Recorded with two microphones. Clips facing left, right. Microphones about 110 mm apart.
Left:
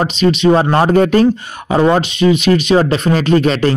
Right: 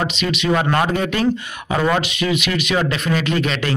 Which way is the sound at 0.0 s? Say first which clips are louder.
Left 9 dB; 35° left (ahead or behind).